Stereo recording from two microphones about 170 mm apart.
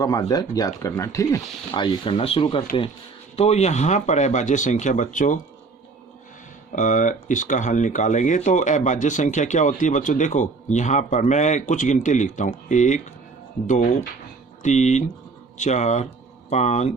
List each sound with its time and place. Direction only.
0.0 s speech: 20° left (ahead or behind); by 5.4 s 50° left (ahead or behind)
6.7 s speech: 50° left (ahead or behind)